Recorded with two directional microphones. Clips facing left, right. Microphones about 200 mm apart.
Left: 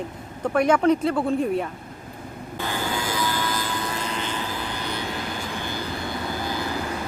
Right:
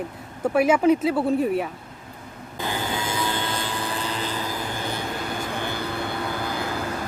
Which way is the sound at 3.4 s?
30° right (ahead or behind).